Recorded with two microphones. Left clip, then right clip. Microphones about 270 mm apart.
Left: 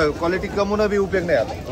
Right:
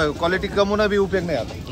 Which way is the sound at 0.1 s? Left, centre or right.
Centre.